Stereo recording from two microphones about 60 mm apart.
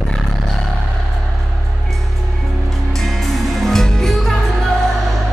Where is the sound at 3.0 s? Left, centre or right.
Centre.